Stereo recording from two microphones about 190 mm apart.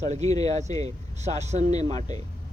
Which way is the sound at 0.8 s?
35° right (ahead or behind).